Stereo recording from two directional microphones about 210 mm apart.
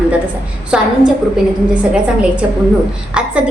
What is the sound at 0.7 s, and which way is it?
A woman's voice, 5° right (ahead or behind).